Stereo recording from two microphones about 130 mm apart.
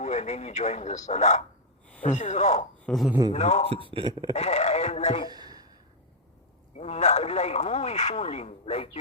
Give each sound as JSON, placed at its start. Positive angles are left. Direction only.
{"t": 0.0, "sound": "speech", "side_deg": 60}
{"t": 2.8, "sound": "speech", "side_deg": 0}
{"t": 3.3, "sound": "speech", "side_deg": 60}
{"t": 3.8, "sound": "speech", "side_deg": -40}
{"t": 4.1, "sound": "speech", "side_deg": -30}
{"t": 4.4, "sound": "speech", "side_deg": 55}
{"t": 5.3, "sound": "a sound", "side_deg": -30}
{"t": 6.7, "sound": "speech", "side_deg": 55}